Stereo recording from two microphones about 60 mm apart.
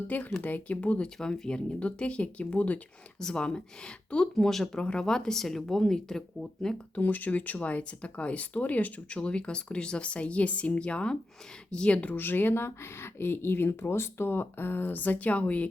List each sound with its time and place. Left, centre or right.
0.1 s speech: left; by 7.0 s centre
7.0 s speech: left